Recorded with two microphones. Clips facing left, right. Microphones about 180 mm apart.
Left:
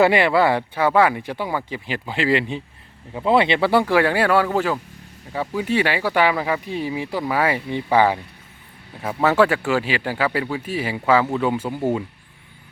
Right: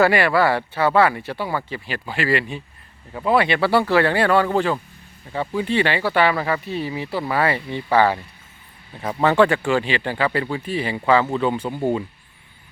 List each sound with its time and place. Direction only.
0.0 s speech: 20° left (ahead or behind)